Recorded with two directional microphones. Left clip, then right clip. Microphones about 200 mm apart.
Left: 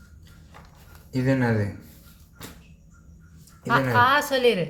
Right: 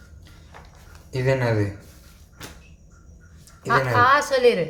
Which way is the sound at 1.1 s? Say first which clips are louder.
Right 2 dB; 40° right (ahead or behind).